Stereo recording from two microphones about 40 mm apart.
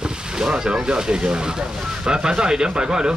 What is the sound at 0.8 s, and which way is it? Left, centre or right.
Speech, centre.